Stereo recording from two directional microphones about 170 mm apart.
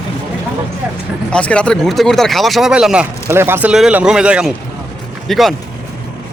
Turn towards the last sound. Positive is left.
turn(degrees=0)  # may be behind; listen again after turning